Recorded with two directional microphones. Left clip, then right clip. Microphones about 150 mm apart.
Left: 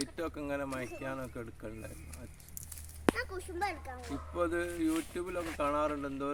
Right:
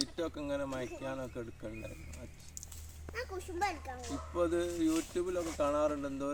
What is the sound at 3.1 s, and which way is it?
Speech, 60° right (ahead or behind).